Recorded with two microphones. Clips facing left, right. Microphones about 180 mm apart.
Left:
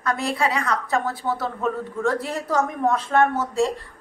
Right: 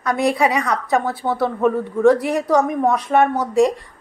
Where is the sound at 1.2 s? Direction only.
40° right (ahead or behind).